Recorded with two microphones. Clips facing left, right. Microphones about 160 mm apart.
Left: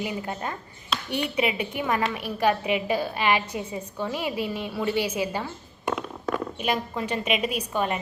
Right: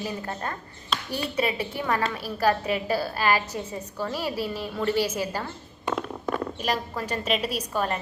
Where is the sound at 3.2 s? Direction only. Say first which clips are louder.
Even; centre (ahead or behind).